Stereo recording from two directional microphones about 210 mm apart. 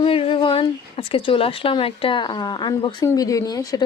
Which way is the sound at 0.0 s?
25° left (ahead or behind).